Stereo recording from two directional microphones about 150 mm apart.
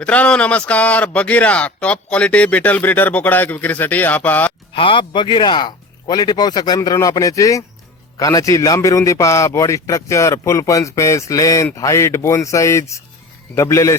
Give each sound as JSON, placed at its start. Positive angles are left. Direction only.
{"t": 0.0, "sound": "a man's voice", "side_deg": 10}
{"t": 4.7, "sound": "a man's voice", "side_deg": 35}